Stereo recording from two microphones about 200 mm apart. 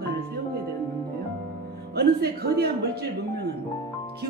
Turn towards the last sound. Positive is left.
turn(degrees=-50)  # may be behind; listen again after turning